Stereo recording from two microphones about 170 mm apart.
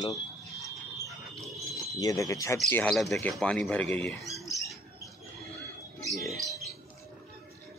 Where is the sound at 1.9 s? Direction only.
20° left (ahead or behind).